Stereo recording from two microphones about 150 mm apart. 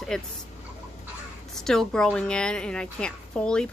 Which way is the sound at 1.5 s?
5° left (ahead or behind).